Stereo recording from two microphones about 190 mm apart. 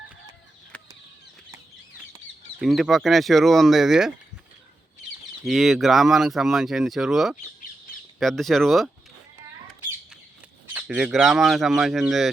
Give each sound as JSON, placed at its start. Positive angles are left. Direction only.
{"t": 0.7, "sound": "a sound", "side_deg": 5}
{"t": 2.6, "sound": "speech", "side_deg": 0}
{"t": 5.5, "sound": "speech", "side_deg": 0}
{"t": 10.8, "sound": "speech", "side_deg": -5}